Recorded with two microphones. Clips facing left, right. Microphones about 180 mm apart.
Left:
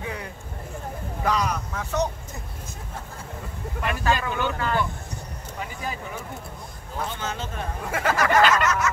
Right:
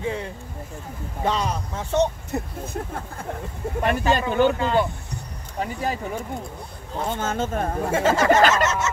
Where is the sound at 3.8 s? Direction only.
35° right (ahead or behind).